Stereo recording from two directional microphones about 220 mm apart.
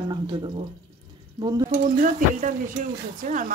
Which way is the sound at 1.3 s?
20° right (ahead or behind).